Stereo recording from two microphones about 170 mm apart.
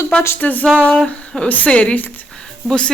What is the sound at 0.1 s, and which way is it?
Speech, 10° left (ahead or behind).